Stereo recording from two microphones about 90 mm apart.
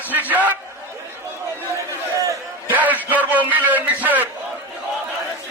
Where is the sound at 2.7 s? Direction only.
20° right (ahead or behind).